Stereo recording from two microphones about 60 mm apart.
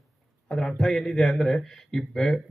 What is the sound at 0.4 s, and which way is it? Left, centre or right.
Speech, centre.